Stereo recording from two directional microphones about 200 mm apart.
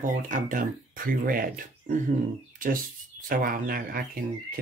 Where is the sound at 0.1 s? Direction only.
40° right (ahead or behind).